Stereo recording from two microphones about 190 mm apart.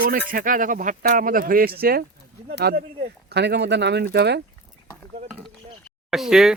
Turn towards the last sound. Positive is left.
turn(degrees=0)  # may be behind; listen again after turning